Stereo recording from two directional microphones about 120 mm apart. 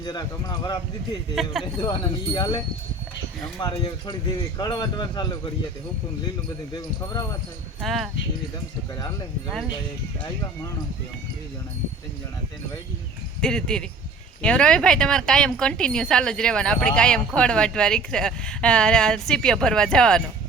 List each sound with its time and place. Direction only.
0.0 s speech: 35° left (ahead or behind)
1.4 s speech: centre (ahead or behind)
1.8 s speech: 35° left (ahead or behind)
3.6 s speech: 35° left (ahead or behind)
6.7 s speech: 30° left (ahead or behind)
7.8 s speech: centre (ahead or behind)
13.4 s speech: 5° left (ahead or behind)